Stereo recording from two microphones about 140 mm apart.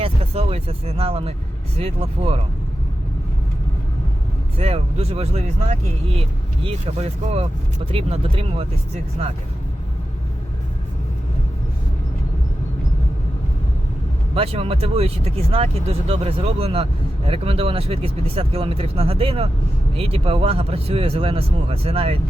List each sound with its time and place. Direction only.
0.0 s a sound: 45° right (ahead or behind)
1.8 s speech: 45° right (ahead or behind)
4.5 s speech: 45° right (ahead or behind)
14.3 s speech: 45° right (ahead or behind)